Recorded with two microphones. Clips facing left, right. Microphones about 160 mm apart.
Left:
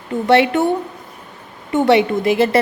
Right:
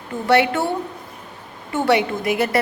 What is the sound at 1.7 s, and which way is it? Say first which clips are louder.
Speech: left 5 dB; 20° left (ahead or behind).